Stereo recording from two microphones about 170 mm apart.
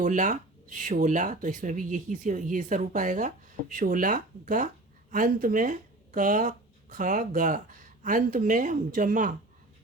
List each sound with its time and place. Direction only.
0.0 s speech: 45° right (ahead or behind)